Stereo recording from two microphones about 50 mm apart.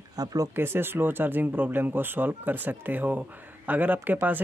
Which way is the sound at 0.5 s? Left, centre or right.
Right.